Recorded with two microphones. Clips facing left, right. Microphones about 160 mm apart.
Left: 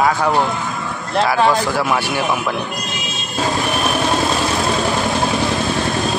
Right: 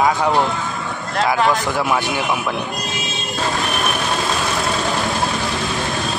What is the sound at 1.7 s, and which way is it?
Speech, 20° right (ahead or behind).